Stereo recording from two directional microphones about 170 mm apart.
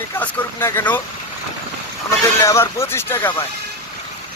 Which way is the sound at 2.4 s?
15° left (ahead or behind).